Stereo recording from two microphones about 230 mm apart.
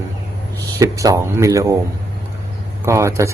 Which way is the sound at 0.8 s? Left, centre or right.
Centre.